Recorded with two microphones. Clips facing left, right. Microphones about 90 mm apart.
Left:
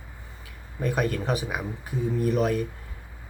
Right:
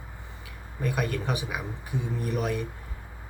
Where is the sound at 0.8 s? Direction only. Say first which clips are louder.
Left 3 dB; 35° left (ahead or behind).